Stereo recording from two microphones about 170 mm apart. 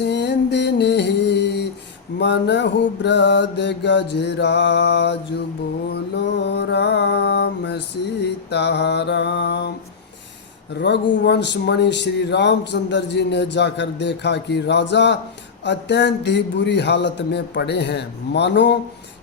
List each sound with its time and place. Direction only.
0.0 s music: 85° left
2.1 s speech: 90° left
6.4 s speech: 90° left
10.8 s speech: 90° left